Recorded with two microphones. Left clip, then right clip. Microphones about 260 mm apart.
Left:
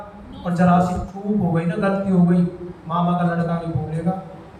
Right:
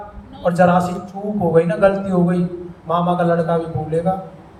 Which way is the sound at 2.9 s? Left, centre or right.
Right.